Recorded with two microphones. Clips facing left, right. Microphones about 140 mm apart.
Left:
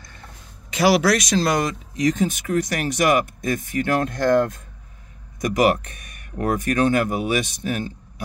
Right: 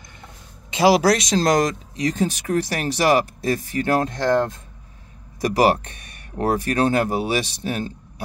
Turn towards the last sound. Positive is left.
turn(degrees=-30)  # may be behind; listen again after turning